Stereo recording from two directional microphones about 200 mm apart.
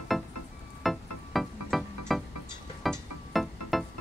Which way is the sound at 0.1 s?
Centre (ahead or behind).